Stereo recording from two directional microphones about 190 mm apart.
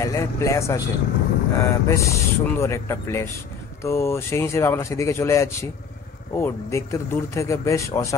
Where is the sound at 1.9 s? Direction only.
15° left (ahead or behind).